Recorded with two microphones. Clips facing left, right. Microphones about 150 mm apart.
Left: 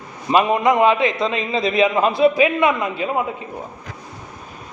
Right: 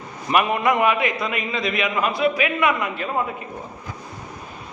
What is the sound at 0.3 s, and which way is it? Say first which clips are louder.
A man's voice: left 4 dB; 20° left (ahead or behind).